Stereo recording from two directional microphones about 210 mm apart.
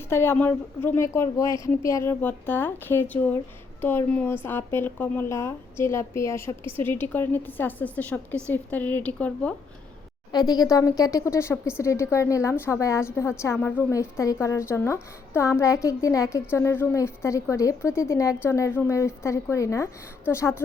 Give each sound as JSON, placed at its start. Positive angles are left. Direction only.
{"t": 0.1, "sound": "a woman's voice", "side_deg": 10}
{"t": 10.3, "sound": "a woman's voice", "side_deg": 20}